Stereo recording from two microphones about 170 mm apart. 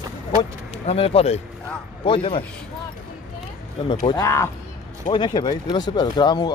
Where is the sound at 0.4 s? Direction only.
35° left (ahead or behind).